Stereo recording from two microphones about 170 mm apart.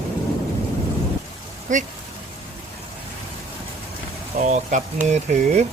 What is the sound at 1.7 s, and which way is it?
Speech, 50° right (ahead or behind).